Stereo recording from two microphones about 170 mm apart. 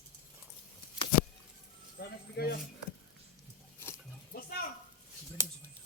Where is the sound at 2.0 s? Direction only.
70° left (ahead or behind).